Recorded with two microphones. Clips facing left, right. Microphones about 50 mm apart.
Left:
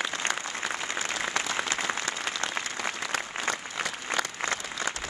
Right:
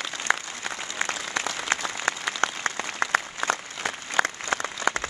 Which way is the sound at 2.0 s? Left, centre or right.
Right.